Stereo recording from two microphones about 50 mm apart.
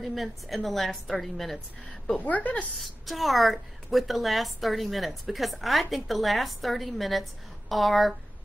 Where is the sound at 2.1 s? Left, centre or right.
Left.